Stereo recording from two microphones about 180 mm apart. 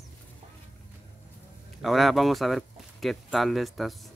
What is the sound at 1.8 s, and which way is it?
Speech, centre (ahead or behind).